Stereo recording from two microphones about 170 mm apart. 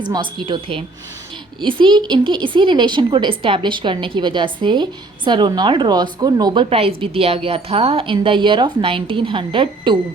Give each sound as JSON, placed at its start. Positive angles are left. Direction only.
{"t": 0.0, "sound": "a woman's voice", "side_deg": -25}